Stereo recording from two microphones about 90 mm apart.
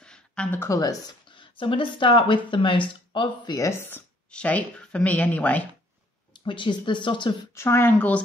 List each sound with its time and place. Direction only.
0.0 s a sound: 10° left (ahead or behind)
0.7 s speech: 40° left (ahead or behind)
1.3 s speech: 65° left (ahead or behind)
4.3 s speech: 15° left (ahead or behind)
6.3 s speech: 65° left (ahead or behind)
7.5 s a woman's voice: 30° left (ahead or behind)